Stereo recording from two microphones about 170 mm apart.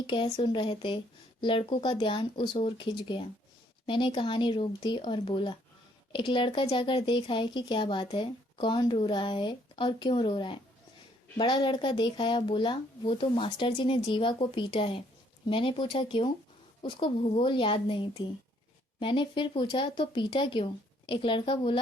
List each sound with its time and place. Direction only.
0.1 s speech: 30° left (ahead or behind)